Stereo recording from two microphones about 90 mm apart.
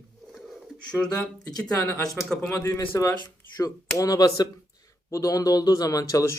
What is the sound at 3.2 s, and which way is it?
Speech, 45° left (ahead or behind).